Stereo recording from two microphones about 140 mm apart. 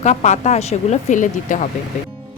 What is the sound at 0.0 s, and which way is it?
Speech, 60° left (ahead or behind).